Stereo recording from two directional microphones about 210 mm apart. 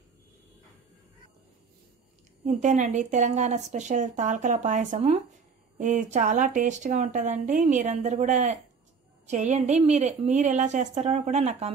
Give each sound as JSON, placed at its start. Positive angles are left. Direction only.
{"t": 2.4, "sound": "speech", "side_deg": -35}